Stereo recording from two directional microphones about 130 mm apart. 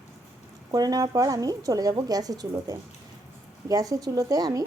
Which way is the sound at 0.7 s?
30° right (ahead or behind).